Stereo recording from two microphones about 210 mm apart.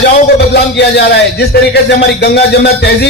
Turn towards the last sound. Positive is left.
turn(degrees=50)  # may be behind; listen again after turning